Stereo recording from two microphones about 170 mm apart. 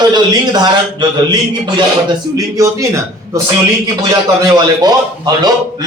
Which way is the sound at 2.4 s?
20° right (ahead or behind).